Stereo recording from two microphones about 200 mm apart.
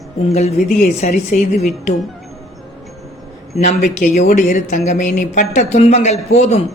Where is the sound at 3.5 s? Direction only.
35° left (ahead or behind).